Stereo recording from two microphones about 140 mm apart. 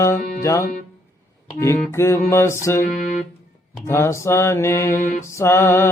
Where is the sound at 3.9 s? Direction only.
20° left (ahead or behind).